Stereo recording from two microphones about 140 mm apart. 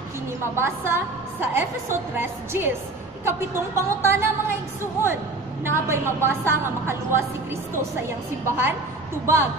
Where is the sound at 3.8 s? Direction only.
20° right (ahead or behind).